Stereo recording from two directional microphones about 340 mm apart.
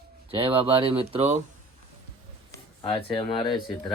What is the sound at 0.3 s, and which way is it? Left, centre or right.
Speech, centre.